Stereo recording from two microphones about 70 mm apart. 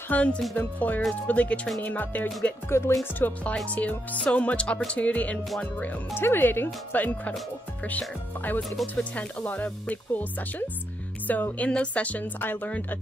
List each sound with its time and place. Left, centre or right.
0.1 s speech: centre
2.8 s music: left
3.2 s speech: left
6.1 s speech: left
8.8 s speech: left
11.2 s speech: left